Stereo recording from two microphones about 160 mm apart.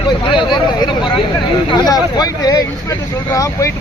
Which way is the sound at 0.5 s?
30° left (ahead or behind).